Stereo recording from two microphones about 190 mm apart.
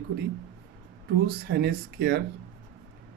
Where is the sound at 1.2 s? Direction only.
55° right (ahead or behind).